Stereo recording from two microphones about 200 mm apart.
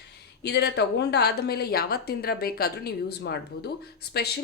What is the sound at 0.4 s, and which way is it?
Speech, 55° left (ahead or behind).